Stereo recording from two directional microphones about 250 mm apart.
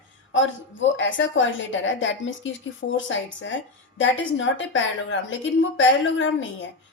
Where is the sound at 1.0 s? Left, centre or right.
Left.